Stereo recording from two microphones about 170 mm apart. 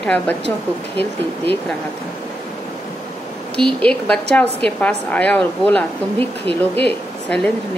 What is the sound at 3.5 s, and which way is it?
A woman's voice, 5° left (ahead or behind).